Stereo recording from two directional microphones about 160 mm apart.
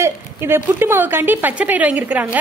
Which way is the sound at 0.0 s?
15° right (ahead or behind).